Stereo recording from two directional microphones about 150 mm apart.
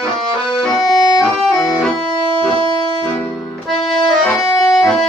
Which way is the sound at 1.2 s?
Centre (ahead or behind).